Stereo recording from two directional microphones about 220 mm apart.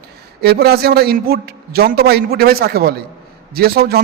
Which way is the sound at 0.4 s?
45° right (ahead or behind).